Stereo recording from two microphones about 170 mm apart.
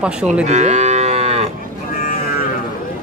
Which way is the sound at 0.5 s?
40° right (ahead or behind).